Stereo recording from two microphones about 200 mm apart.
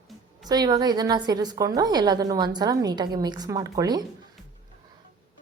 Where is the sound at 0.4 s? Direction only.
20° right (ahead or behind).